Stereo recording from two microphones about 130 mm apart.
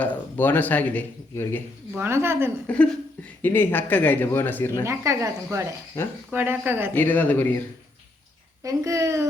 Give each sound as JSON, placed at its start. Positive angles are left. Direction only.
{"t": 0.0, "sound": "speech", "side_deg": 15}
{"t": 2.0, "sound": "speech", "side_deg": -20}
{"t": 2.6, "sound": "speech", "side_deg": 10}
{"t": 4.9, "sound": "speech", "side_deg": -20}
{"t": 6.9, "sound": "speech", "side_deg": 15}
{"t": 8.6, "sound": "speech", "side_deg": -25}